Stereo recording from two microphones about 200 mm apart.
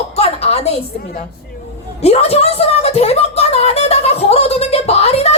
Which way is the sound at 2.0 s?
30° left (ahead or behind).